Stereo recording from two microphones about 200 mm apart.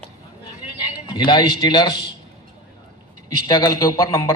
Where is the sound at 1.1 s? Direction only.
20° left (ahead or behind).